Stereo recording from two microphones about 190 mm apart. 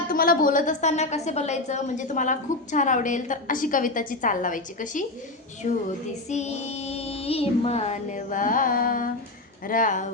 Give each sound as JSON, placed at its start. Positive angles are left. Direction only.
{"t": 0.1, "sound": "a woman's voice", "side_deg": 50}